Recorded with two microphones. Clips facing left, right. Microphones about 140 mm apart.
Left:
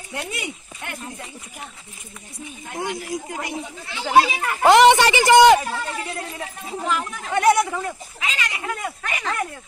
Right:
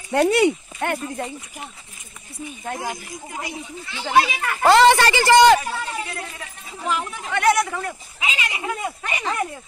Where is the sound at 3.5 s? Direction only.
50° left (ahead or behind).